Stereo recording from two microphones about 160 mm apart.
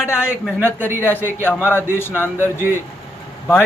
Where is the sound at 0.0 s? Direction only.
15° left (ahead or behind).